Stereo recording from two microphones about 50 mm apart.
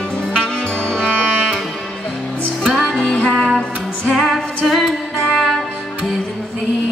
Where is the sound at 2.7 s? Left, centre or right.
Centre.